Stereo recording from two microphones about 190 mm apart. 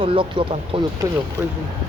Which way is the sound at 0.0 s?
25° right (ahead or behind).